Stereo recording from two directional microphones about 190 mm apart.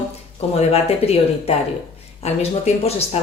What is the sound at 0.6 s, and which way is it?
Speech, 35° left (ahead or behind).